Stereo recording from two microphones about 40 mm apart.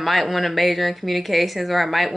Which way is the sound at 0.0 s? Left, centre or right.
Centre.